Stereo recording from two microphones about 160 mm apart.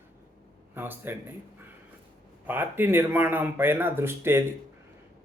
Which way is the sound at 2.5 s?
15° right (ahead or behind).